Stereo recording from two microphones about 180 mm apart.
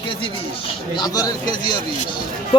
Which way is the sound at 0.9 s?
20° left (ahead or behind).